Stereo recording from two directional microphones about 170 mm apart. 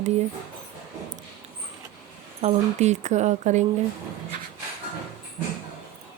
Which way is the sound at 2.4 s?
40° right (ahead or behind).